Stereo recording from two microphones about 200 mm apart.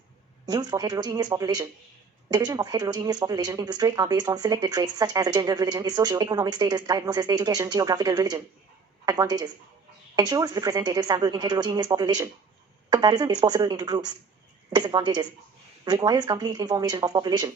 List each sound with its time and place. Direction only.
0.4 s speech: 20° right (ahead or behind)